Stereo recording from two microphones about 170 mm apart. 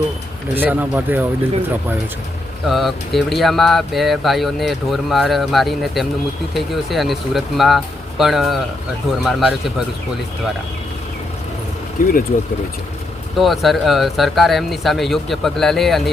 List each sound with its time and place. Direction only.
0.5 s speech: 10° right (ahead or behind)
2.6 s speech: centre (ahead or behind)
12.0 s speech: 55° left (ahead or behind)
13.4 s speech: centre (ahead or behind)